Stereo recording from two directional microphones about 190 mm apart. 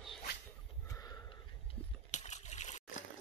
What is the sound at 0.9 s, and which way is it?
Sniff, 15° left (ahead or behind).